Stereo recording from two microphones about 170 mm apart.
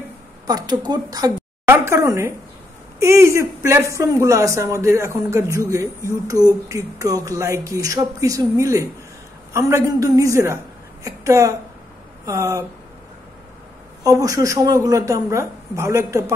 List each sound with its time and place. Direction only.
0.5 s a woman's voice: 25° right (ahead or behind)
14.0 s speech: 20° right (ahead or behind)